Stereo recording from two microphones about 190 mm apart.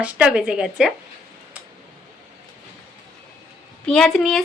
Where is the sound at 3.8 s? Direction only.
5° left (ahead or behind).